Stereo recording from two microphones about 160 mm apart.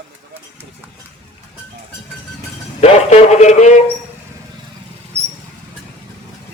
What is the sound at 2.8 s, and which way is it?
Speech, 45° left (ahead or behind).